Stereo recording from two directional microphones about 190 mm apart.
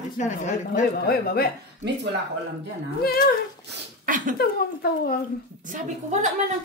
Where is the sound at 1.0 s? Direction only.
55° left (ahead or behind).